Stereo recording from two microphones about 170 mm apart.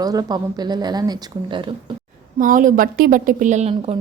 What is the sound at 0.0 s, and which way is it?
A woman's voice, 20° right (ahead or behind).